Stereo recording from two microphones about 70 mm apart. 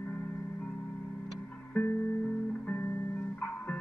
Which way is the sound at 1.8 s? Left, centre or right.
Centre.